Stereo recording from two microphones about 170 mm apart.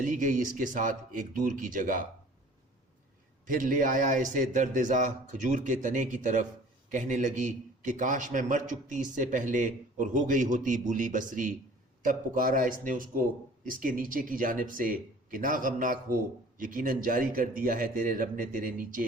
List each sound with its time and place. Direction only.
0.0 s a man's voice: 50° right (ahead or behind)
3.4 s a man's voice: 50° right (ahead or behind)